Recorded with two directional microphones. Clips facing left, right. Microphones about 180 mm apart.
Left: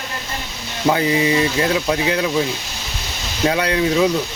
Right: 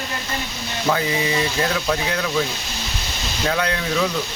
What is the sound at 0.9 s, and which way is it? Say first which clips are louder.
Speech: left 5 dB; 25° left (ahead or behind).